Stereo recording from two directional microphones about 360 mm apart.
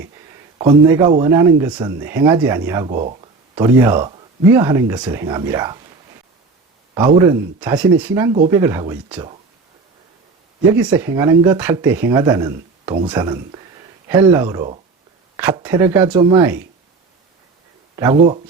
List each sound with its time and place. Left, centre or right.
0.6 s speech: centre
6.9 s speech: centre
10.8 s speech: centre
17.9 s speech: centre